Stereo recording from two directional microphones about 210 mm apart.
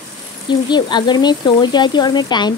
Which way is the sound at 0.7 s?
20° left (ahead or behind).